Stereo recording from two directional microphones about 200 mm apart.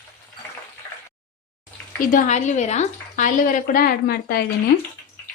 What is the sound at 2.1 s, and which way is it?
A woman's voice, 35° left (ahead or behind).